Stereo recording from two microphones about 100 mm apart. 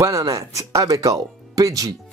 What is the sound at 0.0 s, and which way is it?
Speech, 30° right (ahead or behind).